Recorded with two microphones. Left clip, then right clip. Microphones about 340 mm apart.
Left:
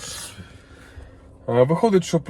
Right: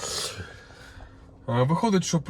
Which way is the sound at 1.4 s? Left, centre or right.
Right.